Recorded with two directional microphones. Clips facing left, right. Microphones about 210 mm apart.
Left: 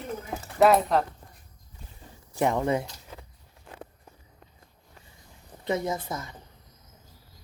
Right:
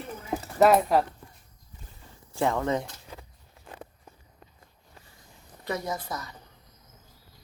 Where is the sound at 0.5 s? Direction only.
Centre (ahead or behind).